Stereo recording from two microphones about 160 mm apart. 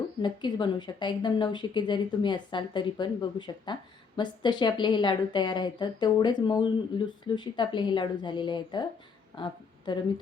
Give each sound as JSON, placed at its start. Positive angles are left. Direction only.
{"t": 0.2, "sound": "a woman's voice", "side_deg": 30}